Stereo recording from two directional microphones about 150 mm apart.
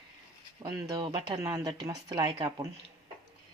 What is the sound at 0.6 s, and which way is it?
Speech, 25° right (ahead or behind).